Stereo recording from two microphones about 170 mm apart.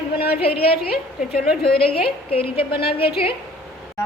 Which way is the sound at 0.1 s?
65° left (ahead or behind).